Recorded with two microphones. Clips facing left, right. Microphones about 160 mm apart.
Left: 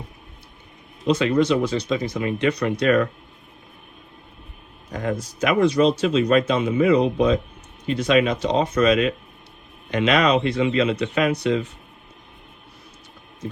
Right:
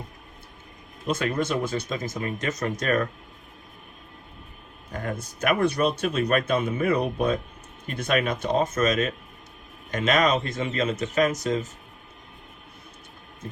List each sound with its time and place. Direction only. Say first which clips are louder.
1.0 s speech: left 7 dB; 50° right (ahead or behind)
4.9 s speech: left 6 dB; 55° right (ahead or behind)